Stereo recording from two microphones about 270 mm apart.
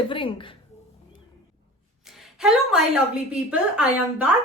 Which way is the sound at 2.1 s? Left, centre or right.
Centre.